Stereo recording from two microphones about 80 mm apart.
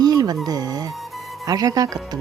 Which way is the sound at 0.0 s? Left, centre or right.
Right.